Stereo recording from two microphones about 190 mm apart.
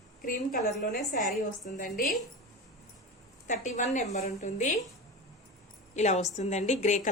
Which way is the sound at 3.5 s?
40° left (ahead or behind).